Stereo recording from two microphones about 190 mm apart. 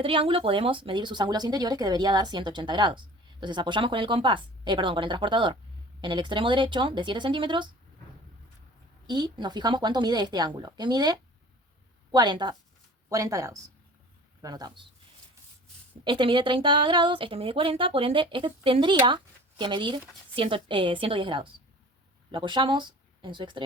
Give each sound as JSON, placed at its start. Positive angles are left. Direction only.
{"t": 0.0, "sound": "speech", "side_deg": -30}
{"t": 9.0, "sound": "speech", "side_deg": -25}
{"t": 16.0, "sound": "speech", "side_deg": -25}